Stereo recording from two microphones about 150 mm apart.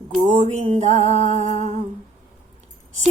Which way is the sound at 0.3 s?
50° right (ahead or behind).